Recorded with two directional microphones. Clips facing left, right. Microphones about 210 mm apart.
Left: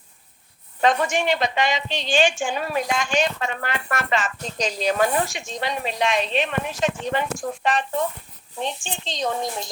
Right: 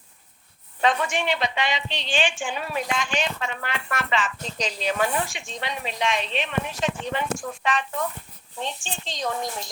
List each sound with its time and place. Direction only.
0.8 s a woman's voice: 45° left (ahead or behind)
8.5 s speech: 15° left (ahead or behind)